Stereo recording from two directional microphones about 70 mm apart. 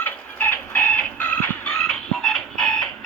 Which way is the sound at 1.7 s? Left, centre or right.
Centre.